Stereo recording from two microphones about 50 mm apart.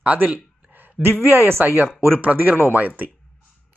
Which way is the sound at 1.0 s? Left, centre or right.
Right.